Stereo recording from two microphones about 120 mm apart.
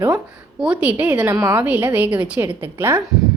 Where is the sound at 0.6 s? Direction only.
10° right (ahead or behind).